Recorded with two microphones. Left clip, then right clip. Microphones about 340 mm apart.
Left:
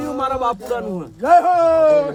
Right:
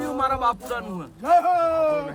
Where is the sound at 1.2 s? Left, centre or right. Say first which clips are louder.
Left 6 dB; right.